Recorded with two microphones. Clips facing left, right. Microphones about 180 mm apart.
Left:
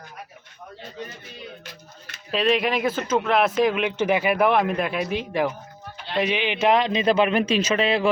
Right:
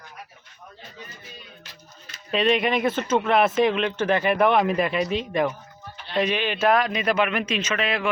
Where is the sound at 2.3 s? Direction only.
Centre (ahead or behind).